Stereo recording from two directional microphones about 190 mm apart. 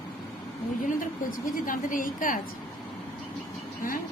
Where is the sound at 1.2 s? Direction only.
45° left (ahead or behind).